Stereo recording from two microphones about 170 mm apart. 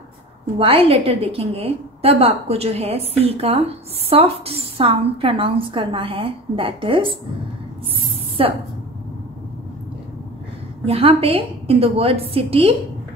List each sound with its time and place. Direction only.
0.6 s a woman's voice: 35° right (ahead or behind)
8.4 s a woman's voice: 35° right (ahead or behind)
10.9 s a woman's voice: 35° right (ahead or behind)